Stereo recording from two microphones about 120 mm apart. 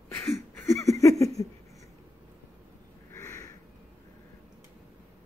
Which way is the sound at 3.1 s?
25° left (ahead or behind).